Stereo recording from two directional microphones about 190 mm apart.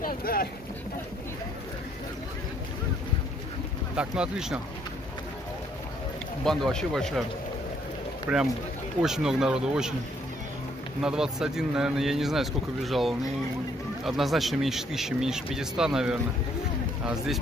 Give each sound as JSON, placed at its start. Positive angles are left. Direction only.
{"t": 0.0, "sound": "boat", "side_deg": 50}
{"t": 3.9, "sound": "speech", "side_deg": -5}
{"t": 6.4, "sound": "speech", "side_deg": 0}
{"t": 8.3, "sound": "speech", "side_deg": -5}
{"t": 11.0, "sound": "speech", "side_deg": -5}